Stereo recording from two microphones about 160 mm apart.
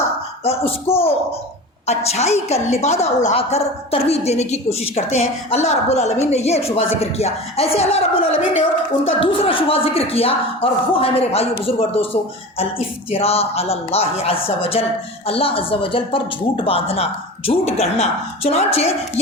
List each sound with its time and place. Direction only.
0.4 s a woman's voice: 40° left (ahead or behind)